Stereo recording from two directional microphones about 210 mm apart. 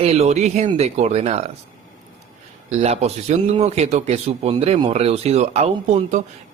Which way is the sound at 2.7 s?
30° right (ahead or behind).